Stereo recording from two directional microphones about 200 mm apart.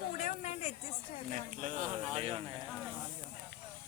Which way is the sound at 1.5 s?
35° right (ahead or behind).